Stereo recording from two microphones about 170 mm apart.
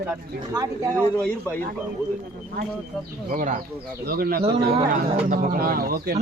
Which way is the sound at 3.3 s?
50° right (ahead or behind).